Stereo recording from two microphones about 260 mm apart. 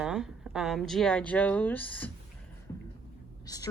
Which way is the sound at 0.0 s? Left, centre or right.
Centre.